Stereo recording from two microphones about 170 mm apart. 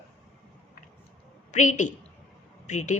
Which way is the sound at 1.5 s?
45° left (ahead or behind).